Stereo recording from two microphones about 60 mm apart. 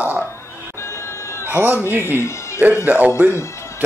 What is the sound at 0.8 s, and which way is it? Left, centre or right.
Neigh, left.